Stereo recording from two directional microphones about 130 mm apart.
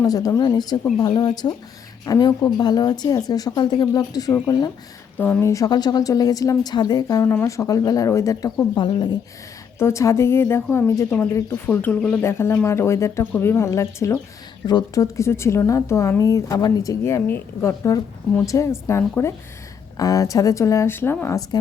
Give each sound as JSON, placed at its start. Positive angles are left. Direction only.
{"t": 0.0, "sound": "speech", "side_deg": 30}
{"t": 5.1, "sound": "speech", "side_deg": 15}
{"t": 9.7, "sound": "speech", "side_deg": 20}